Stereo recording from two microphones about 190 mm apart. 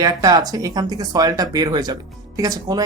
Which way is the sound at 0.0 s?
20° right (ahead or behind).